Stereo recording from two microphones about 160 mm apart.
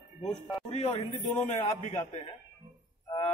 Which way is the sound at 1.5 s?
45° left (ahead or behind).